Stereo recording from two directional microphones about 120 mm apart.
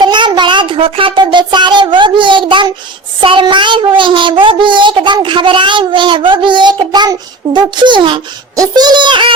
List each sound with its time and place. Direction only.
0.0 s a sound: 40° right (ahead or behind)
3.2 s a child's voice: 45° right (ahead or behind)
8.5 s speech: 30° right (ahead or behind)